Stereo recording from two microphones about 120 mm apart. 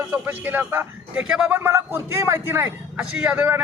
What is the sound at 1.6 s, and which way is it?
A man's voice, 20° right (ahead or behind).